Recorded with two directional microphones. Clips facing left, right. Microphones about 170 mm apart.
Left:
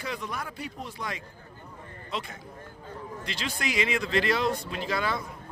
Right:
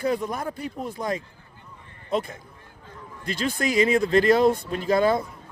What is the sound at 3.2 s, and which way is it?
A man's voice, 50° right (ahead or behind).